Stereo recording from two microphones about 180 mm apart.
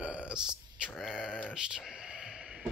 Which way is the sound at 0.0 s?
5° right (ahead or behind).